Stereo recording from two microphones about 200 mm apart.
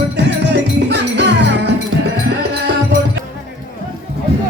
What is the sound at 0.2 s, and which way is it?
Music, 60° right (ahead or behind).